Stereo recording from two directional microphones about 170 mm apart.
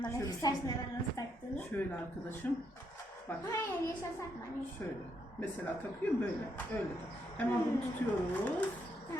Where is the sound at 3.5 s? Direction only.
15° left (ahead or behind).